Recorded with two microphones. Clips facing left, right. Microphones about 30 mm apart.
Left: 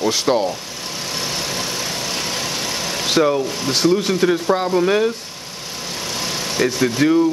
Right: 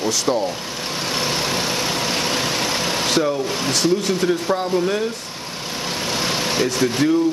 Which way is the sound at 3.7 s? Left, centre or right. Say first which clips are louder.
Left 3 dB; left.